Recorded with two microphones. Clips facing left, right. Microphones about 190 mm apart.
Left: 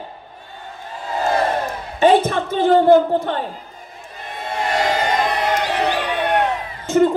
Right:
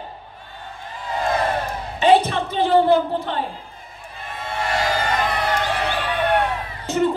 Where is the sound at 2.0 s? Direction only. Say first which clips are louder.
Left 2 dB; 50° left (ahead or behind).